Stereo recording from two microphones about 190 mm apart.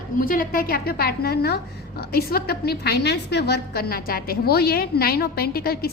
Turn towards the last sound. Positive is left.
turn(degrees=55)  # may be behind; listen again after turning